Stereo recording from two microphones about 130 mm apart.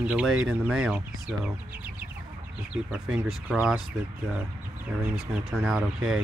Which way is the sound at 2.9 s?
10° right (ahead or behind).